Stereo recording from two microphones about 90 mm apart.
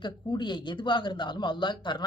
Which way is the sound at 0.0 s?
55° left (ahead or behind).